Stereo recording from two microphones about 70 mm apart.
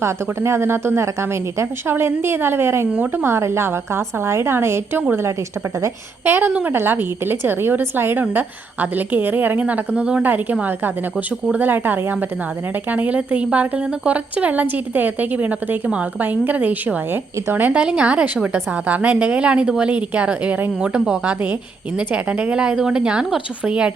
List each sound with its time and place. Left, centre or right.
0.0 s a woman's voice: right
2.9 s a woman's voice: right
3.2 s a woman's voice: right
6.2 s a woman's voice: right
6.5 s a woman's voice: centre
6.7 s a woman's voice: right
17.8 s a woman's voice: centre